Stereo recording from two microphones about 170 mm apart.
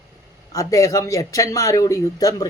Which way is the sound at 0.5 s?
20° left (ahead or behind).